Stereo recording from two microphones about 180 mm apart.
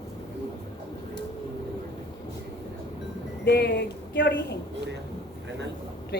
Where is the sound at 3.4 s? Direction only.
70° left (ahead or behind).